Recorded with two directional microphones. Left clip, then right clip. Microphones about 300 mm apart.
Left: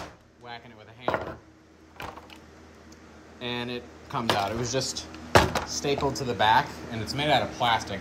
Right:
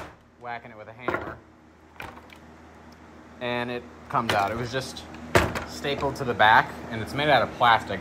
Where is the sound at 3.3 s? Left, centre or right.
Centre.